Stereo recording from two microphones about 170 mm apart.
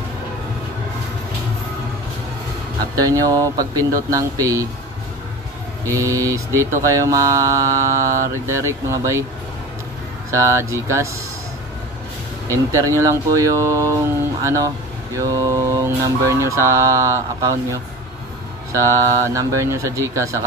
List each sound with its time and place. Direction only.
3.0 s speech: 20° right (ahead or behind)
5.9 s speech: 20° right (ahead or behind)
10.3 s speech: 15° right (ahead or behind)
12.4 s speech: 20° right (ahead or behind)
18.7 s speech: 15° right (ahead or behind)